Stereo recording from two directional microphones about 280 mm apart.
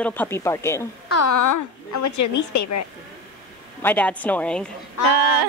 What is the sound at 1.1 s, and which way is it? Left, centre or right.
Speech, left.